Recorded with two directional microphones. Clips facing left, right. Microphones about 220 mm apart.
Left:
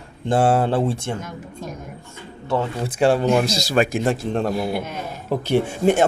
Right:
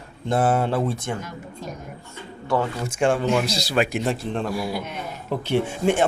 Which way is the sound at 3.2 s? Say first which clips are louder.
Left 3 dB; 45° left (ahead or behind).